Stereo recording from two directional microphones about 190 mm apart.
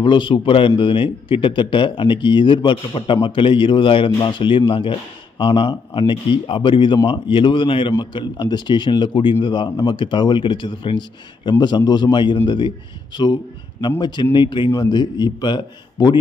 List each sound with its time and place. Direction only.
0.0 s speech: 25° left (ahead or behind)